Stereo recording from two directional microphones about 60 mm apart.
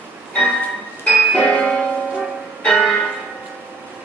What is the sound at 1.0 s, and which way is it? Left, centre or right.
Music, centre.